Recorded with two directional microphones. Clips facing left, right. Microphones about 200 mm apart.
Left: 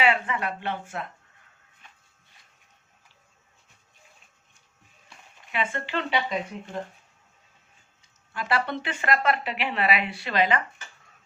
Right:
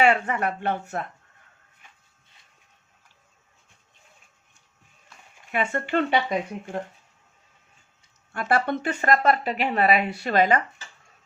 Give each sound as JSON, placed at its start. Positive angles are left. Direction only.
{"t": 0.0, "sound": "speech", "side_deg": -45}
{"t": 5.5, "sound": "speech", "side_deg": -50}
{"t": 8.3, "sound": "speech", "side_deg": -50}